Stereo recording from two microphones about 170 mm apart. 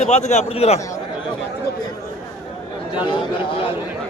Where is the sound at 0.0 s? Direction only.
40° left (ahead or behind).